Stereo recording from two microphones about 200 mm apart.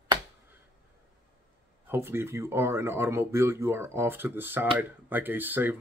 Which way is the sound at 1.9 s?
10° right (ahead or behind).